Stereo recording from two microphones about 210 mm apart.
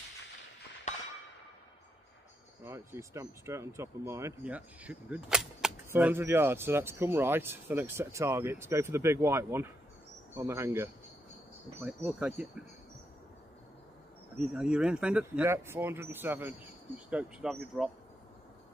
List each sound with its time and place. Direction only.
0.9 s a sound: 35° left (ahead or behind)
2.6 s speech: 15° right (ahead or behind)
14.4 s speech: 5° right (ahead or behind)